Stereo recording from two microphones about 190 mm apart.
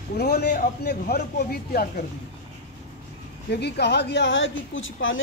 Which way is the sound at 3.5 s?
60° left (ahead or behind).